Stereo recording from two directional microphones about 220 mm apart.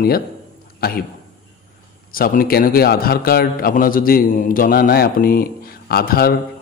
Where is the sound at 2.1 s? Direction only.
40° left (ahead or behind).